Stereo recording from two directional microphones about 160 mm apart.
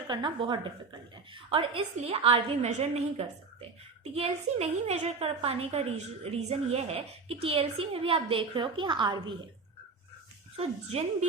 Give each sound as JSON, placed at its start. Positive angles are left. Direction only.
{"t": 0.1, "sound": "a woman's voice", "side_deg": -30}
{"t": 10.6, "sound": "a woman's voice", "side_deg": -45}